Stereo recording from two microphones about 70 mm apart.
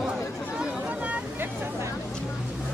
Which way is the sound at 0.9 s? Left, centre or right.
Centre.